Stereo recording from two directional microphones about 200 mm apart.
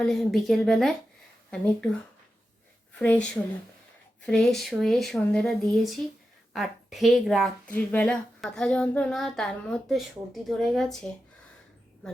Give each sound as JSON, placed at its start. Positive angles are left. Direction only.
{"t": 0.0, "sound": "a woman's voice", "side_deg": 0}
{"t": 3.0, "sound": "a woman's voice", "side_deg": 5}
{"t": 4.3, "sound": "a woman's voice", "side_deg": 5}